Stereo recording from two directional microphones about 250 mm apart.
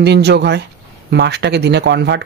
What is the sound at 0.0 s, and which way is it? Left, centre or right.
Speech, right.